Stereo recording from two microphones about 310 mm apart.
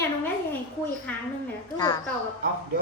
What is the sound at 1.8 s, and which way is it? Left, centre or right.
Speech, centre.